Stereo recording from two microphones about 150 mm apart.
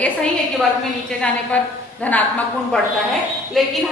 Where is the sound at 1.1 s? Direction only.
5° left (ahead or behind).